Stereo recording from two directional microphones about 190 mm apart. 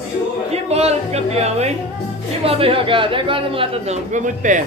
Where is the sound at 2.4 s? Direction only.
30° right (ahead or behind).